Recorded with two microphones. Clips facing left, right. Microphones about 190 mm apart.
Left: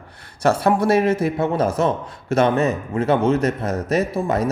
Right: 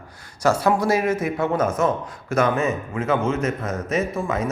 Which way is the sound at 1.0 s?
30° left (ahead or behind).